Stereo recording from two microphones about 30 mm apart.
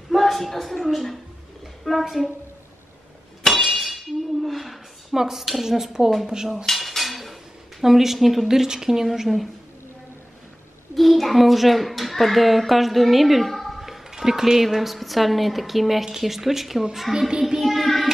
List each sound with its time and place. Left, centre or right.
0.1 s a woman's voice: centre
3.4 s a sound: left
3.8 s a sound: centre
5.1 s a woman's voice: centre
6.2 s cutlery: right
6.5 s cutlery: centre
7.8 s a woman's voice: centre
8.5 s a woman's voice: centre
11.0 s a child's voice: centre
14.1 s a woman's voice: centre
17.6 s child singing: centre